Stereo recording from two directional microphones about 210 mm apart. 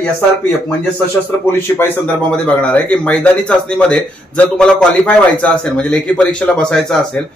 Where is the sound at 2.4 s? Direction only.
5° left (ahead or behind).